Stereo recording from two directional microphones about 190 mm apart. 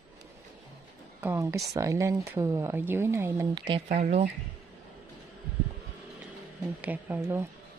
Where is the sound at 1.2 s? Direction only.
15° right (ahead or behind).